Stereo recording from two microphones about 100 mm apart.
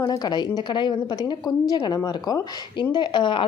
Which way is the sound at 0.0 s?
45° left (ahead or behind).